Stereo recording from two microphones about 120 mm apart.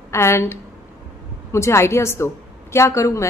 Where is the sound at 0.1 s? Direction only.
20° left (ahead or behind).